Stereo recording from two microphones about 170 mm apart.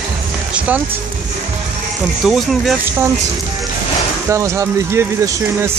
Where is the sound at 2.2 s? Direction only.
Centre (ahead or behind).